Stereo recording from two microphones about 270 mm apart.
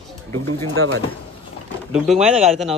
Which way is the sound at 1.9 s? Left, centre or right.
Centre.